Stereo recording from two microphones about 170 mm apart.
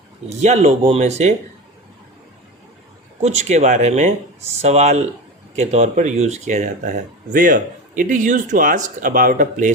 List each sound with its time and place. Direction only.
0.3 s speech: 40° right (ahead or behind)
3.2 s speech: 40° right (ahead or behind)